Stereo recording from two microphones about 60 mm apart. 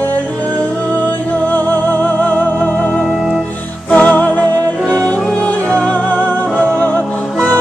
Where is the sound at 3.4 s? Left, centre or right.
Left.